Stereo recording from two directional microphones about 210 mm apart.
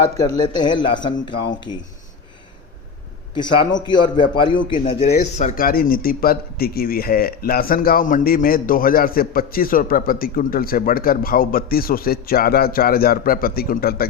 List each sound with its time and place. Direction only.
0.2 s a man's voice: 20° left (ahead or behind)
3.3 s a man's voice: 20° left (ahead or behind)
5.1 s a man's voice: 45° left (ahead or behind)